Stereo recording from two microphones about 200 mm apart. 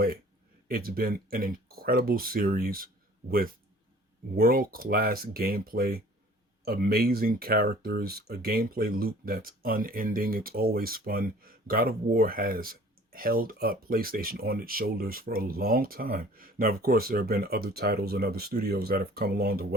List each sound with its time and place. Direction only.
0.7 s speech: 45° right (ahead or behind)